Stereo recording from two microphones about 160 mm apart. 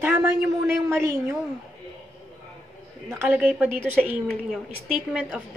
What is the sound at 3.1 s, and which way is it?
A woman's voice, 10° right (ahead or behind).